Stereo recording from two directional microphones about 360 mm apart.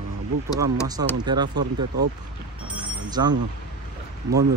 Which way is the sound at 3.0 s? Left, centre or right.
Centre.